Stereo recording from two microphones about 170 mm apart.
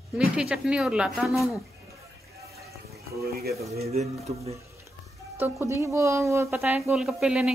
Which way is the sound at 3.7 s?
40° right (ahead or behind).